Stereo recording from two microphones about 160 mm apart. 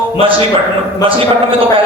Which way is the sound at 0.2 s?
35° right (ahead or behind).